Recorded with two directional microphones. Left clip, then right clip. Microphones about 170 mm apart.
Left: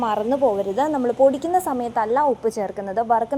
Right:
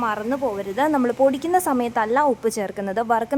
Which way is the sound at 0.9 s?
20° right (ahead or behind).